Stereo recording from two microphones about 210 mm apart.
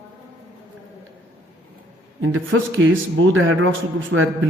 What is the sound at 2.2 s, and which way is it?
Speech, 70° right (ahead or behind).